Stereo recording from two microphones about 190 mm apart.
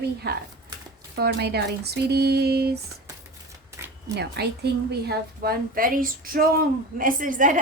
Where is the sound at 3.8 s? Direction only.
15° right (ahead or behind).